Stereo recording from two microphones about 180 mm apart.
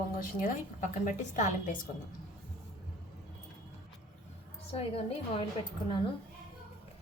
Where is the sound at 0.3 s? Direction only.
45° left (ahead or behind).